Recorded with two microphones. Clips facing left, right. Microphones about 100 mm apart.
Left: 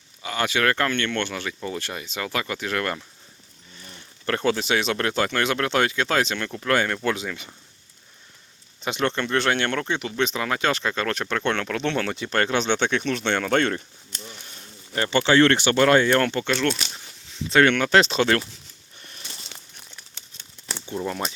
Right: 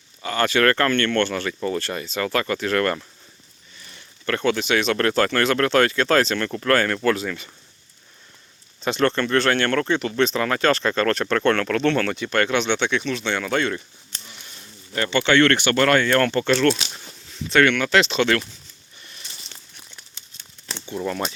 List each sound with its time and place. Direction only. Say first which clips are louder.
0.2 s speech: right 4 dB; 10° left (ahead or behind)
3.8 s speech: left 2 dB; 30° left (ahead or behind); by 7.5 s 15° left (ahead or behind)
8.8 s speech: right 4 dB; 15° left (ahead or behind); by 13.8 s 50° left (ahead or behind)
14.3 s a sound: left 2 dB; 40° left (ahead or behind)
14.9 s speech: even; 25° left (ahead or behind)
17.5 s speech: even; 30° left (ahead or behind)
20.9 s speech: right 2 dB; 15° left (ahead or behind)